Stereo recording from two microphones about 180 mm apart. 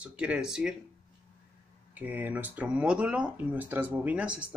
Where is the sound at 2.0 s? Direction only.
10° right (ahead or behind).